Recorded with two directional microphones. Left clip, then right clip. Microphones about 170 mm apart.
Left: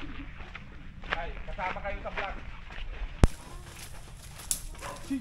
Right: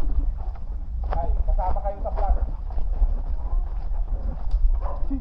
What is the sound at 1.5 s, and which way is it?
Speech, 35° left (ahead or behind).